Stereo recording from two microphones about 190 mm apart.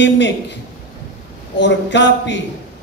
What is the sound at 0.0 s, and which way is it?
Speech, 70° left (ahead or behind).